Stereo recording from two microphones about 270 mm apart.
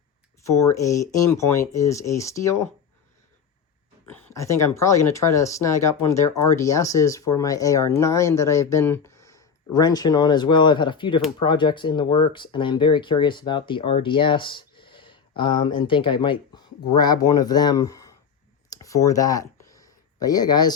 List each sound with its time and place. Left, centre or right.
0.4 s speech: centre
4.4 s speech: centre
18.7 s a sound: centre